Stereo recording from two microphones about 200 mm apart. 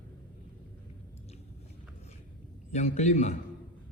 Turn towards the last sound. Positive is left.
turn(degrees=35)  # may be behind; listen again after turning